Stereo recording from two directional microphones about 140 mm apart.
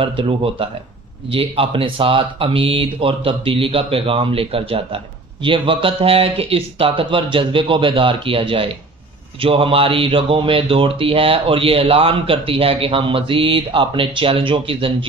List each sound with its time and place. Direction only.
0.0 s speech: 40° right (ahead or behind)